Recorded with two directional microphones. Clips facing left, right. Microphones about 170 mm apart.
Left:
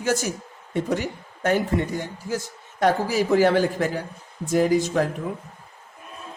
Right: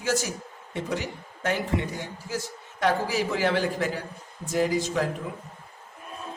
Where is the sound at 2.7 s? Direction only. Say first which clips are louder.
Left 4 dB; 45° left (ahead or behind).